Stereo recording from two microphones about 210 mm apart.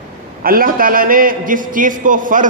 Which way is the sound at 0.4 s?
45° right (ahead or behind).